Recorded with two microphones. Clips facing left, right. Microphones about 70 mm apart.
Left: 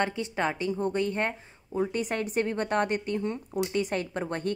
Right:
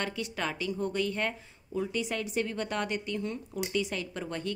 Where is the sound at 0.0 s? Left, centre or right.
Left.